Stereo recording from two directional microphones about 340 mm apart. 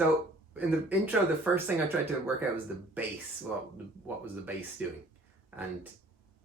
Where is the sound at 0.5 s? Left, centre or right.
Centre.